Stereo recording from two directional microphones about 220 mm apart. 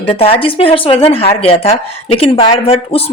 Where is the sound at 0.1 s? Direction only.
25° left (ahead or behind).